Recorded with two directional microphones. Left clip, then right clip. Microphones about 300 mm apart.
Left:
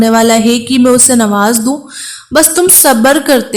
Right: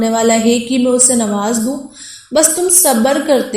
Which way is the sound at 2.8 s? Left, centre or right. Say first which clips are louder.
Left 5 dB; left.